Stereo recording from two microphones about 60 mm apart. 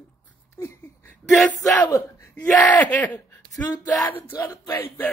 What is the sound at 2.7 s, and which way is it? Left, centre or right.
Speech, left.